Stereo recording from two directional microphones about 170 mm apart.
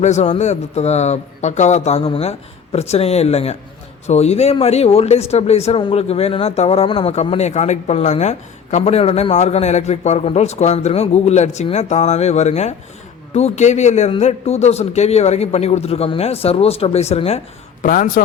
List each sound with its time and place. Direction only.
0.0 s speech: 40° left (ahead or behind)
17.8 s a man's voice: 55° left (ahead or behind)